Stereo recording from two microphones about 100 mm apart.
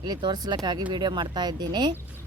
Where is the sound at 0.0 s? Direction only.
45° right (ahead or behind).